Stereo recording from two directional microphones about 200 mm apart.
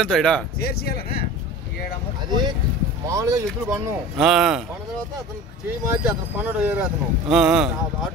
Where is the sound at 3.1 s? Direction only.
15° right (ahead or behind).